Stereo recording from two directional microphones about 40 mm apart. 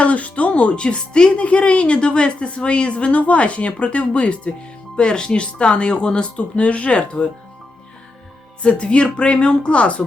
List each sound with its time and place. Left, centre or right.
0.0 s speech: left
8.6 s speech: left